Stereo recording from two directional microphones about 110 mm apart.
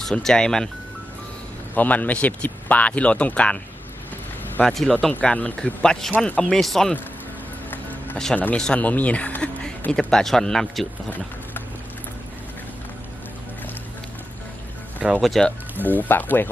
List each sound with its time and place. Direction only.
0.0 s speech: 5° left (ahead or behind)
1.7 s speech: 15° left (ahead or behind)
4.6 s speech: 5° left (ahead or behind)
7.7 s music: 15° left (ahead or behind)
8.4 s speech: 15° left (ahead or behind)
14.9 s music: 15° right (ahead or behind)
15.2 s speech: 5° left (ahead or behind)
16.0 s speech: 15° left (ahead or behind)